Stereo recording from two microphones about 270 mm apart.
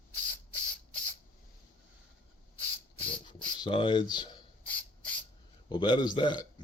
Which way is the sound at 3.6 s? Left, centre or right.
Centre.